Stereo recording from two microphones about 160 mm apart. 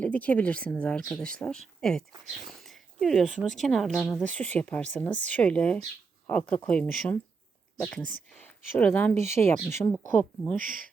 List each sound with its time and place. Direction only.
0.0 s speech: 10° left (ahead or behind)
9.1 s speech: 45° right (ahead or behind)
9.4 s speech: 15° left (ahead or behind)